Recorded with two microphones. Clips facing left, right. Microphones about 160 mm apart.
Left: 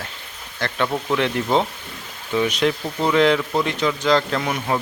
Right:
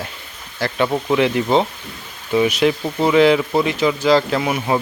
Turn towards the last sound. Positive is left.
turn(degrees=-10)  # may be behind; listen again after turning